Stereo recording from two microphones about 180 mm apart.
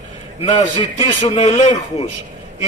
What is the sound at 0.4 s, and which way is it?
A man's voice, 40° left (ahead or behind).